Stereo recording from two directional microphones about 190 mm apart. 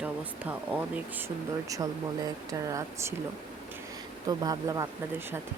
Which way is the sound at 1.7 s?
20° right (ahead or behind).